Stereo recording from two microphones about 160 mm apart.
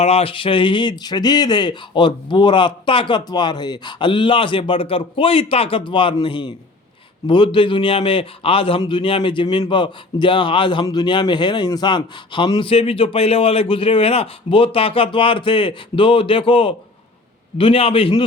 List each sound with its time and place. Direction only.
0.0 s a man's voice: 40° left (ahead or behind)